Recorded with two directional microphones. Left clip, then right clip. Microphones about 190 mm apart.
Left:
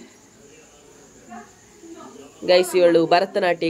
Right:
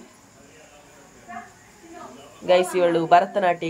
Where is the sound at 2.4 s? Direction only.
15° left (ahead or behind).